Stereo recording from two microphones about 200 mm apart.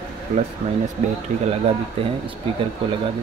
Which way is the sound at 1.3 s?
40° right (ahead or behind).